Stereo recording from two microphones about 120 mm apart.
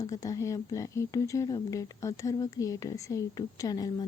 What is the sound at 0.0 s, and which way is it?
A woman's voice, 30° left (ahead or behind).